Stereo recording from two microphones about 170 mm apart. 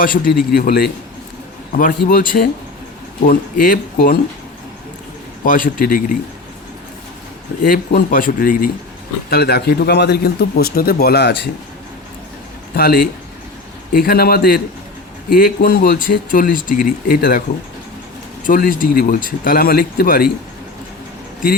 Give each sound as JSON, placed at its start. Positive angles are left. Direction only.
{"t": 0.0, "sound": "speech", "side_deg": 60}
{"t": 5.5, "sound": "speech", "side_deg": 55}
{"t": 7.6, "sound": "speech", "side_deg": 60}
{"t": 9.3, "sound": "a man's voice", "side_deg": 70}
{"t": 12.7, "sound": "speech", "side_deg": 65}
{"t": 18.4, "sound": "speech", "side_deg": 55}